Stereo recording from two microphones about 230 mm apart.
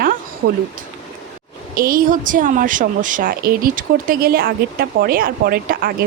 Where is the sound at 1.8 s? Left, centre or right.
Right.